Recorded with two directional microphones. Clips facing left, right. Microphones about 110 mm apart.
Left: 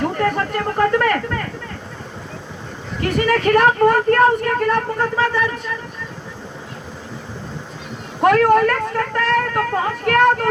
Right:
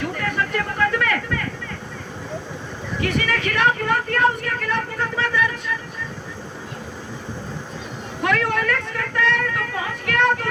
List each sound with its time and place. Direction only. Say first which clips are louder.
0.0 s a sound: left 5 dB; 40° left (ahead or behind)
3.0 s speech: left 6 dB; 45° left (ahead or behind)
8.2 s speech: left 9 dB; 45° left (ahead or behind)